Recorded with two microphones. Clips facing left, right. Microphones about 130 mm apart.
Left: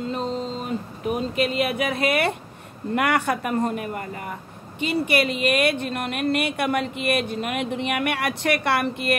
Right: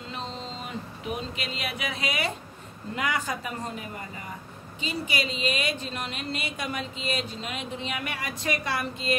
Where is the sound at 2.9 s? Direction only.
65° left (ahead or behind).